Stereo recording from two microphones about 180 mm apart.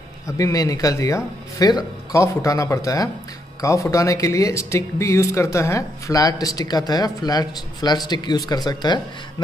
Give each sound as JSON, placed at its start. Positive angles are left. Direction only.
{"t": 0.4, "sound": "speech", "side_deg": 20}